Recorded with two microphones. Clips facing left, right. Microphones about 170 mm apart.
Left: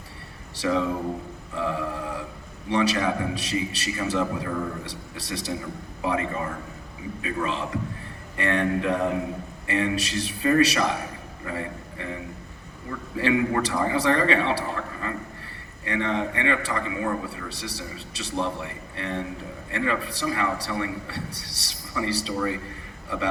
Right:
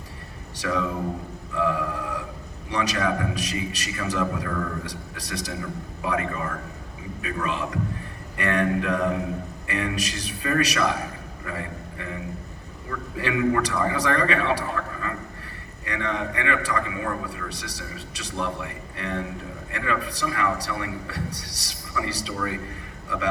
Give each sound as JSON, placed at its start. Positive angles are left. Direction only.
{"t": 0.5, "sound": "a man's voice", "side_deg": 30}
{"t": 1.5, "sound": "a sound", "side_deg": 30}
{"t": 2.6, "sound": "a man's voice", "side_deg": 30}
{"t": 13.1, "sound": "a man's voice", "side_deg": 30}